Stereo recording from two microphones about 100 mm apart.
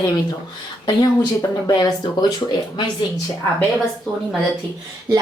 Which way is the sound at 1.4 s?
45° left (ahead or behind).